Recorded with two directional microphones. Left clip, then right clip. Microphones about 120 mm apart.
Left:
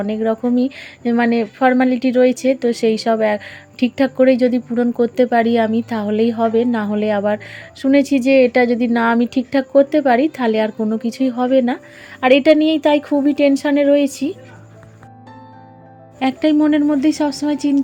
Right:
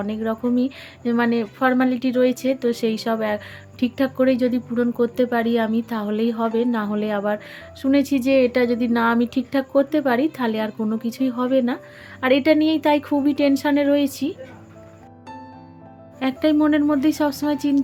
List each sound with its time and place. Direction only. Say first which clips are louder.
0.0 s a woman's voice: left 6 dB; 25° left (ahead or behind)
16.1 s speech: left 4 dB; 30° left (ahead or behind)
16.6 s a woman's voice: left 3 dB; 15° left (ahead or behind)